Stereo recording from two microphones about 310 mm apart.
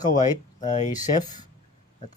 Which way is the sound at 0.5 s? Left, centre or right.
Left.